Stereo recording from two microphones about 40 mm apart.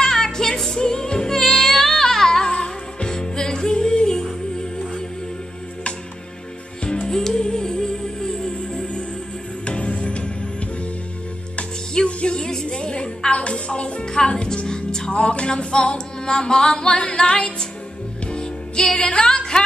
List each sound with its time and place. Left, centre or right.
0.0 s music: centre
2.5 s music: left
7.1 s music: centre
9.7 s music: left
11.9 s music: left
15.1 s singing: left
18.2 s music: left